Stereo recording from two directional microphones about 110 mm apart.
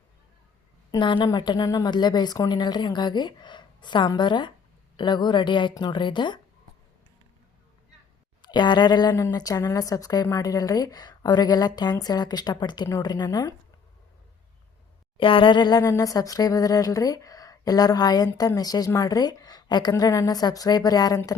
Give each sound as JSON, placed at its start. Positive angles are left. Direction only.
{"t": 0.9, "sound": "speech", "side_deg": 45}
{"t": 8.4, "sound": "speech", "side_deg": 45}
{"t": 15.2, "sound": "speech", "side_deg": 50}